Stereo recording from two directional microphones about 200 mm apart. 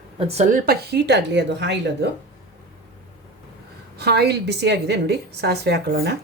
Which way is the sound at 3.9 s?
55° right (ahead or behind).